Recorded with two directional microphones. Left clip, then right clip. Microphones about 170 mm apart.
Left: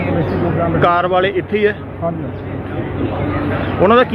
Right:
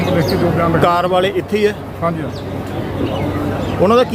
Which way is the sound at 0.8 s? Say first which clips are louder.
Left 2 dB; 20° right (ahead or behind).